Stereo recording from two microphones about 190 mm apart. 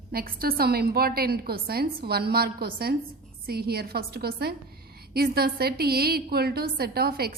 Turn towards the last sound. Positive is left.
turn(degrees=-55)  # may be behind; listen again after turning